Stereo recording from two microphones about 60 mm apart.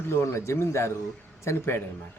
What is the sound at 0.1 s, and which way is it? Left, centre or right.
A man's voice, left.